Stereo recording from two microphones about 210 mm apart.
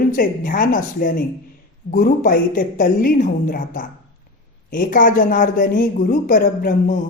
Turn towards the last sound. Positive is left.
turn(degrees=40)  # may be behind; listen again after turning